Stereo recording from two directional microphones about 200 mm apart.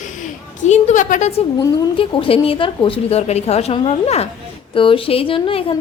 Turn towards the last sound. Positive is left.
turn(degrees=30)  # may be behind; listen again after turning